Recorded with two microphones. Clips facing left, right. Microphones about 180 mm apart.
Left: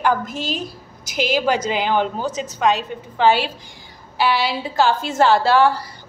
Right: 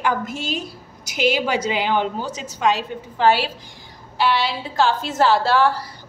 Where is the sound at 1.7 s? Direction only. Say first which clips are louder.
Left 1 dB; 50° left (ahead or behind).